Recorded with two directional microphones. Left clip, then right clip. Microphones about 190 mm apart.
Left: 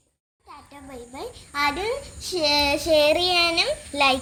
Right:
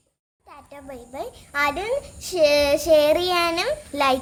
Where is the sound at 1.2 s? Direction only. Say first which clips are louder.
Right 2 dB; 30° right (ahead or behind).